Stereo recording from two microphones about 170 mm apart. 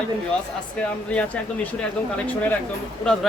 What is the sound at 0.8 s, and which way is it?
Speech, 5° left (ahead or behind).